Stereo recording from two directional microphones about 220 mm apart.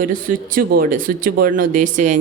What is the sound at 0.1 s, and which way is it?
A woman's voice, 40° right (ahead or behind).